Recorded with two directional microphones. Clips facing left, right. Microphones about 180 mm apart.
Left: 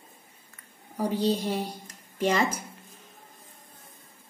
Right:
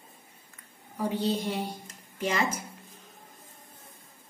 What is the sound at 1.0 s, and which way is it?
A woman's voice, 35° left (ahead or behind).